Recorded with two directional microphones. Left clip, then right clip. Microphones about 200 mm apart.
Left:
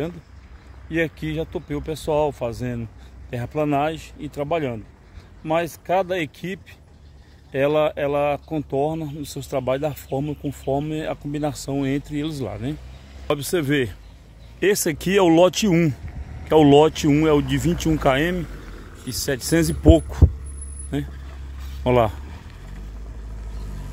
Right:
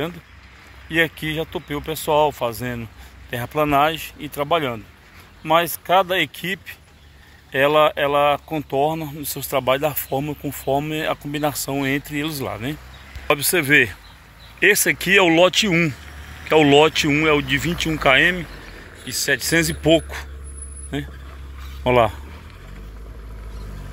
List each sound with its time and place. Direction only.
0.8 s speech: centre (ahead or behind)
14.6 s speech: 25° left (ahead or behind)